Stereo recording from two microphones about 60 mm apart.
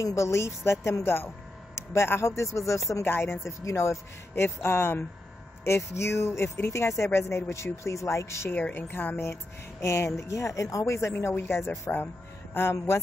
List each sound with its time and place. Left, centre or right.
0.0 s a woman's voice: left
3.1 s a woman's voice: left
3.6 s speech: left
5.6 s speech: left
8.5 s a woman's voice: left
9.2 s speech: left